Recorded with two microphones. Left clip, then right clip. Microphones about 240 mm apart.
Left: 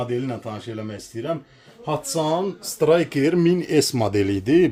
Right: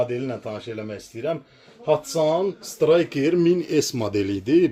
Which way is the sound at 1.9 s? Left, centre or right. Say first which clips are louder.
Right 3 dB; left.